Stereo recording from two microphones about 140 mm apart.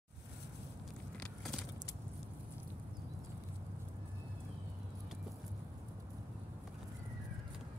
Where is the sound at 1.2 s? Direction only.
5° left (ahead or behind).